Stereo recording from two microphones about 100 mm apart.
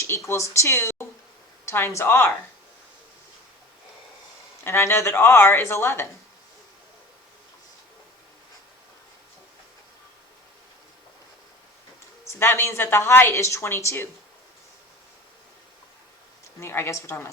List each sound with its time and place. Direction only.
0.0 s a woman's voice: 25° left (ahead or behind)
4.6 s a woman's voice: 25° left (ahead or behind)
12.4 s a woman's voice: 25° left (ahead or behind)
16.6 s a woman's voice: 25° left (ahead or behind)